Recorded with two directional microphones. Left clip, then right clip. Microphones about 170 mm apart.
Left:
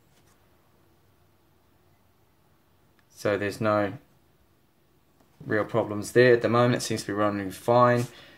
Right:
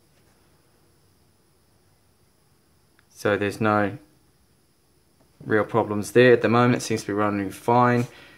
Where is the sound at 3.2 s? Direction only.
15° right (ahead or behind).